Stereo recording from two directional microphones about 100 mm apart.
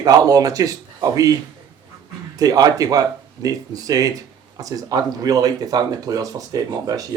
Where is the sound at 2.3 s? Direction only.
40° right (ahead or behind).